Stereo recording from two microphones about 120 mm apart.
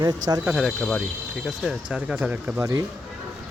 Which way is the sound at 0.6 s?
5° left (ahead or behind).